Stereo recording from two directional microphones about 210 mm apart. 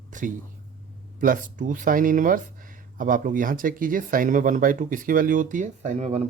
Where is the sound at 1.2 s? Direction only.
40° right (ahead or behind).